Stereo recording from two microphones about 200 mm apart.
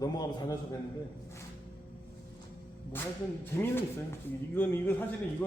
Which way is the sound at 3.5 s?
10° left (ahead or behind).